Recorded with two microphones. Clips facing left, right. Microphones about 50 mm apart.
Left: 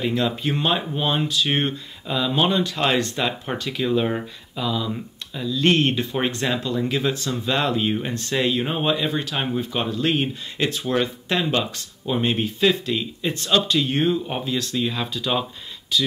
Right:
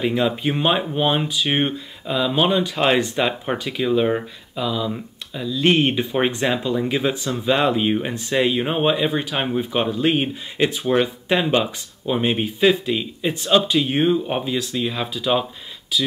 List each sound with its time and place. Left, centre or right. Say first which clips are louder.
0.0 s speech: right 3 dB; centre